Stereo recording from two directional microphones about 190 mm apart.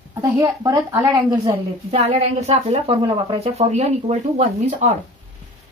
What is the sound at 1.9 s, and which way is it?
A woman's voice, 35° right (ahead or behind).